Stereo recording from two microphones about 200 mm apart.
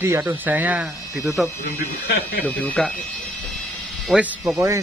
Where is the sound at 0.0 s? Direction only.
10° right (ahead or behind).